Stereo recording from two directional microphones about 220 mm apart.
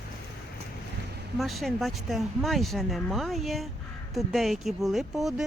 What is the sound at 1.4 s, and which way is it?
Speech, centre (ahead or behind).